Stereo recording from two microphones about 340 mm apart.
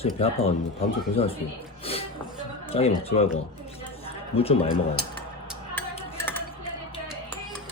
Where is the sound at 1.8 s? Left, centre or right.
Centre.